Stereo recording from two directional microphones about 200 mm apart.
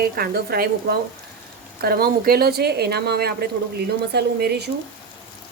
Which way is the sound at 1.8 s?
50° right (ahead or behind).